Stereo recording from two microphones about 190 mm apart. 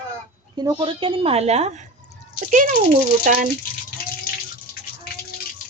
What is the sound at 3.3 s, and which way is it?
Speech, 45° right (ahead or behind).